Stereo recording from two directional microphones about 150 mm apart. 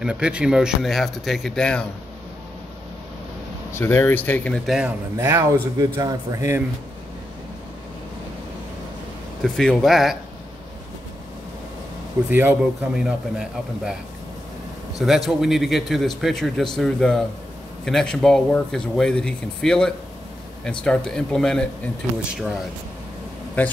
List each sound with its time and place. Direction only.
0.0 s speech: 5° right (ahead or behind)
3.7 s speech: 15° left (ahead or behind)
4.6 s speech: 5° right (ahead or behind)
5.1 s speech: 20° right (ahead or behind)
9.4 s speech: 5° left (ahead or behind)
12.3 s a man's voice: 10° right (ahead or behind)
15.0 s speech: centre (ahead or behind)
23.6 s speech: 10° left (ahead or behind)